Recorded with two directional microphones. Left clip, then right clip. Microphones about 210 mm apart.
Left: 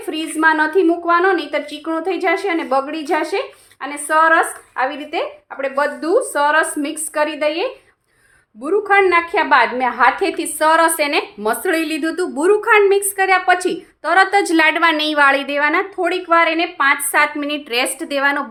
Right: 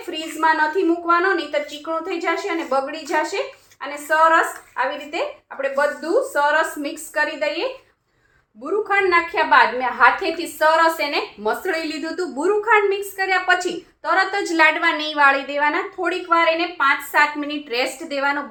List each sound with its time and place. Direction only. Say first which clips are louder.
0.1 s a woman's voice: left 4 dB; 50° left (ahead or behind)